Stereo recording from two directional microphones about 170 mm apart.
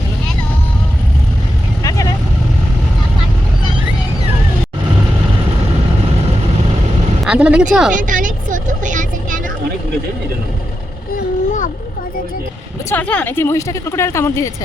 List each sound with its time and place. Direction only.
1.8 s vehicle: 20° left (ahead or behind)
7.3 s speech: 5° right (ahead or behind)
7.9 s vehicle: 50° right (ahead or behind)
12.9 s speech: 10° left (ahead or behind)